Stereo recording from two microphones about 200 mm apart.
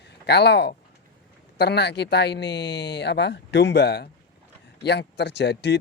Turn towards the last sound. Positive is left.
turn(degrees=60)  # may be behind; listen again after turning